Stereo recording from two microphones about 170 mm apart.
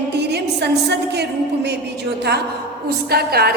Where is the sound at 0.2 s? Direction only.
75° right (ahead or behind).